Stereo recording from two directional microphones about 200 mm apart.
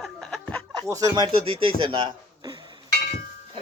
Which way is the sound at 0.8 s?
15° right (ahead or behind).